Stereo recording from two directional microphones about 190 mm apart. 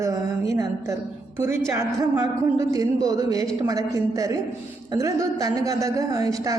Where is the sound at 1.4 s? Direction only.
15° right (ahead or behind).